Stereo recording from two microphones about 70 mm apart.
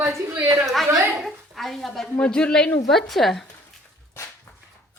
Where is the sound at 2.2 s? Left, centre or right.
Centre.